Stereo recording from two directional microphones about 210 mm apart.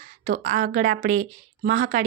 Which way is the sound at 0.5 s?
40° right (ahead or behind).